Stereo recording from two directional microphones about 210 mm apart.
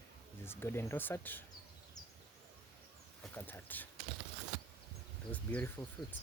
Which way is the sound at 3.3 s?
10° left (ahead or behind).